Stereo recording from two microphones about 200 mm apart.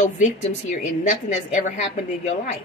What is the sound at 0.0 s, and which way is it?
Speech, 35° left (ahead or behind).